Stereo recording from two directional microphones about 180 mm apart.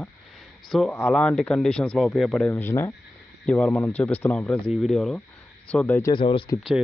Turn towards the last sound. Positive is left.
turn(degrees=30)  # may be behind; listen again after turning